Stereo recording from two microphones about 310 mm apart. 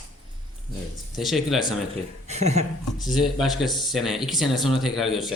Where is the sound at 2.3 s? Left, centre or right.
Right.